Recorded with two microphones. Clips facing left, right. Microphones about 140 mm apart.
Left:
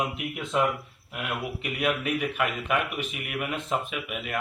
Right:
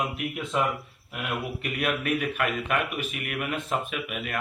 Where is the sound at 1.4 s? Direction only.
15° left (ahead or behind).